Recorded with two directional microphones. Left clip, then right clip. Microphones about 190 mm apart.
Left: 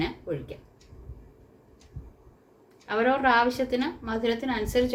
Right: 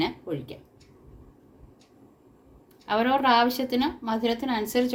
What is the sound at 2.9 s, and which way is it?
A woman's voice, 50° right (ahead or behind).